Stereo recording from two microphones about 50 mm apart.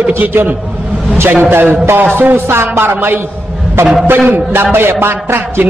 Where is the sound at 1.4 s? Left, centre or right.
Right.